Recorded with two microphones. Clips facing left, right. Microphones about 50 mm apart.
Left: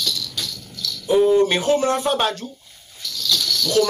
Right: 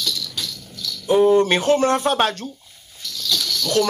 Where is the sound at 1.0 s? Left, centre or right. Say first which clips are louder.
Right 1 dB; right.